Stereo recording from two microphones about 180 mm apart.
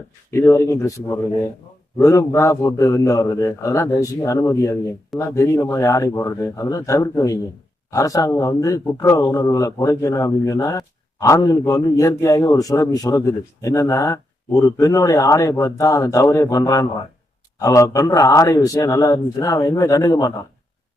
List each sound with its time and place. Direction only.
0.3 s a man's voice: 15° left (ahead or behind)